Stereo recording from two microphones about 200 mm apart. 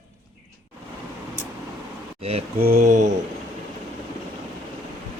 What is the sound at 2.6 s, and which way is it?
Speech, 45° right (ahead or behind).